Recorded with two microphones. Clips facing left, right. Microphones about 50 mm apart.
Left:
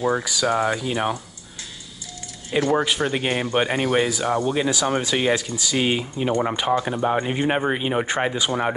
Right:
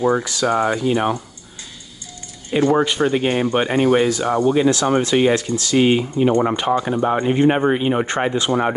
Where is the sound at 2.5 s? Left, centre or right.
Centre.